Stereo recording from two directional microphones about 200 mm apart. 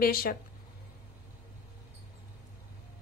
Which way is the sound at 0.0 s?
50° left (ahead or behind).